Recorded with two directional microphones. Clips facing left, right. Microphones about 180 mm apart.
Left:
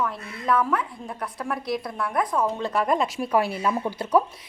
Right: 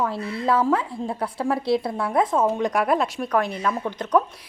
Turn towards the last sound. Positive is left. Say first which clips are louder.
# even
turn(degrees=10)  # may be behind; listen again after turning